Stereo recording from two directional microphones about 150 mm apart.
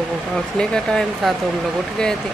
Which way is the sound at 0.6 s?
5° left (ahead or behind).